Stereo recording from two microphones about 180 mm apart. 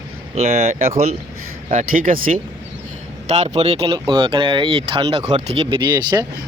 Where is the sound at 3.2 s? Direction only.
35° right (ahead or behind).